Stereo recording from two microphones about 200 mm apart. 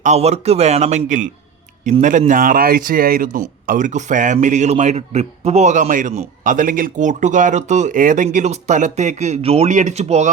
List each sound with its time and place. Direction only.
0.0 s a man's voice: 35° right (ahead or behind)